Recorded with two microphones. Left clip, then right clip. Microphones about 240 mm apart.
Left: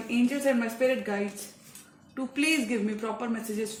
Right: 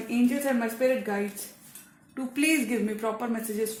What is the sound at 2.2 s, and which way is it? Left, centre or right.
A woman's voice, right.